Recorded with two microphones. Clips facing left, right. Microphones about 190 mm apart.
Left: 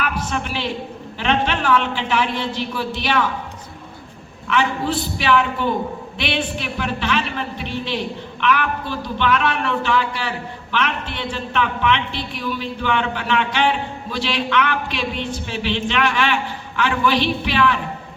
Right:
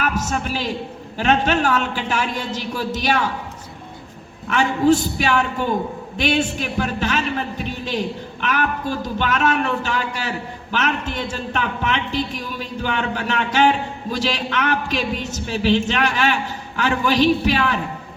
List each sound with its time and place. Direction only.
0.0 s a man's voice: 45° right (ahead or behind)
4.4 s a man's voice: 45° right (ahead or behind)